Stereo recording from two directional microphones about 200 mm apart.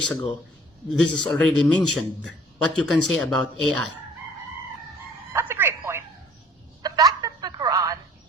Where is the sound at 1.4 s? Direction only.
5° left (ahead or behind).